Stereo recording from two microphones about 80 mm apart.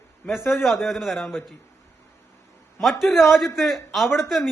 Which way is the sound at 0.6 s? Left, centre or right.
Centre.